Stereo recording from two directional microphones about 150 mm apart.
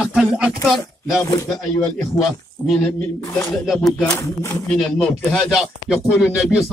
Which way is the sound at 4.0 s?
20° left (ahead or behind).